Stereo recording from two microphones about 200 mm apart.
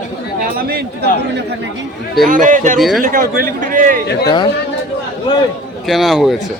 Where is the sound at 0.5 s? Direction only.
50° right (ahead or behind).